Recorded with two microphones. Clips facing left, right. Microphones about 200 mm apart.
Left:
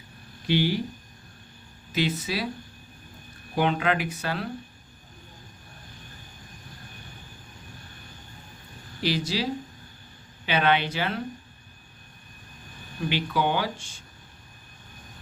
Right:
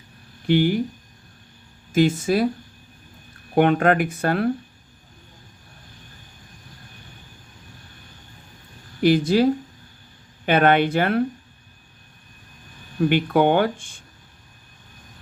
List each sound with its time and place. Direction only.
0.4 s speech: 50° right (ahead or behind)
1.9 s speech: 50° right (ahead or behind)
3.5 s speech: 55° right (ahead or behind)
9.0 s speech: 50° right (ahead or behind)
13.0 s speech: 55° right (ahead or behind)